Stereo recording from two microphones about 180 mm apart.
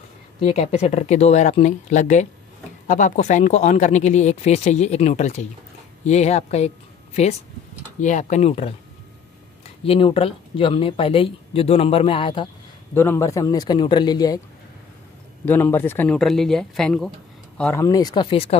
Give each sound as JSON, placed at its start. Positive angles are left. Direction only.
{"t": 0.4, "sound": "speech", "side_deg": 35}
{"t": 8.0, "sound": "speech", "side_deg": 45}
{"t": 9.8, "sound": "speech", "side_deg": 30}
{"t": 12.9, "sound": "a man's voice", "side_deg": 15}
{"t": 15.4, "sound": "a man's voice", "side_deg": 10}